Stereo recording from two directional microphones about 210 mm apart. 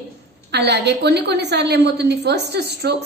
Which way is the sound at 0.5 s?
55° right (ahead or behind).